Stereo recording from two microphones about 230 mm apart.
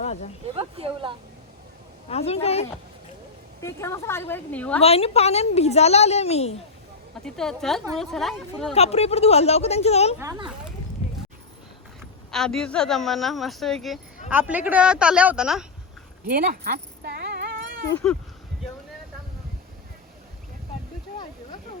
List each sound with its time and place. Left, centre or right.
0.0 s a sound: left
0.5 s speech: right
2.0 s a woman's voice: left
3.6 s a woman's voice: centre
4.8 s a woman's voice: left
7.3 s speech: centre
8.7 s a woman's voice: left
10.2 s a child's voice: centre
12.3 s speech: centre
16.2 s a sound: right
17.9 s speech: centre